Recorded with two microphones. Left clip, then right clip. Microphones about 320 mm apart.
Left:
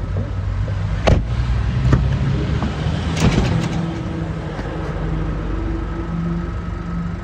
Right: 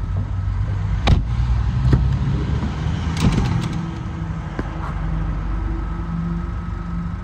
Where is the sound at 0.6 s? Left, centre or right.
Right.